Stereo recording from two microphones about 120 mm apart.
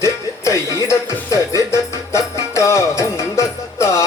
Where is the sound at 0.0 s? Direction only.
25° left (ahead or behind).